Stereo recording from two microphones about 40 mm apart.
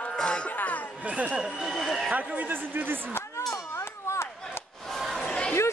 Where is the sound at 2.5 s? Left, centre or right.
Right.